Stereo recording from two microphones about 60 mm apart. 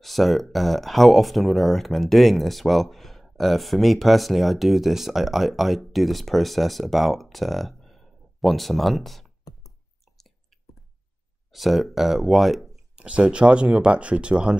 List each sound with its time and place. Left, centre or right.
0.0 s speech: centre
11.5 s speech: centre
12.9 s speech: centre